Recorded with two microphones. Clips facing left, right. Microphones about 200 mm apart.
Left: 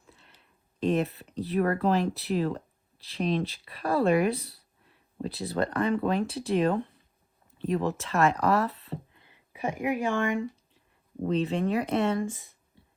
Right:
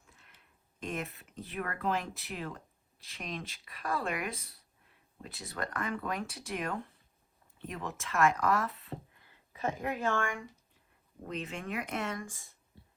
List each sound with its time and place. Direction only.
0.1 s a sound: 30° left (ahead or behind)
0.8 s speech: 35° left (ahead or behind)
9.1 s speech: 20° left (ahead or behind)
11.3 s speech: 30° left (ahead or behind)